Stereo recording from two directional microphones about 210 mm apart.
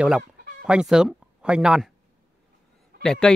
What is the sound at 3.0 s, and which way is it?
Speech, centre (ahead or behind).